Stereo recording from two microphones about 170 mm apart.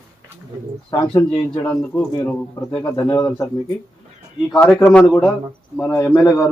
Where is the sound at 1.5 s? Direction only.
10° left (ahead or behind).